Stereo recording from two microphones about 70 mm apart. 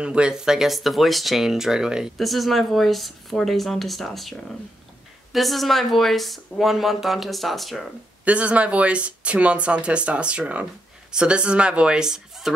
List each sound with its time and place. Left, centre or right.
0.0 s speech: centre
2.1 s speech: centre
8.3 s speech: centre